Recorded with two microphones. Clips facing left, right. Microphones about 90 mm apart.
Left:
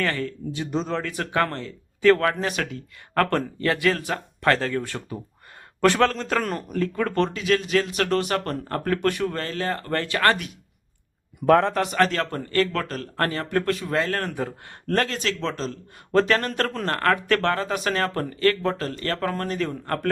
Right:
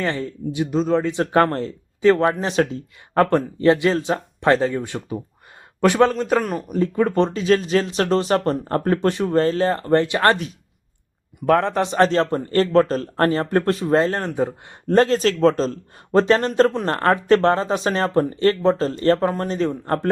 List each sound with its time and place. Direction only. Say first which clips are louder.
0.0 s speech: right 2 dB; 20° right (ahead or behind)
0.7 s speech: right 6 dB; centre (ahead or behind)
0.9 s speech: right 8 dB; 20° right (ahead or behind)
1.3 s speech: right 6 dB; 35° right (ahead or behind)
2.0 s a man's voice: right 2 dB; 20° right (ahead or behind); by 6.7 s 5° right (ahead or behind)
6.7 s a man's voice: right 5 dB; 20° right (ahead or behind)
7.3 s speech: right 5 dB; 30° right (ahead or behind)
11.3 s speech: even; centre (ahead or behind)
11.7 s speech: right 4 dB; 25° right (ahead or behind)
15.0 s speech: right 11 dB; 35° right (ahead or behind)
16.1 s speech: right 5 dB; 25° right (ahead or behind)